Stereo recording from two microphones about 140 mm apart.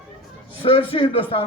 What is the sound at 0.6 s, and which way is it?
Speech, 40° left (ahead or behind).